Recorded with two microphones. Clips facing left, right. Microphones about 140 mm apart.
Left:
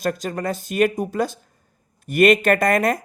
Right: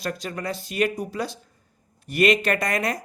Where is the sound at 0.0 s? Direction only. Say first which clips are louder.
Left 6 dB; 45° left (ahead or behind).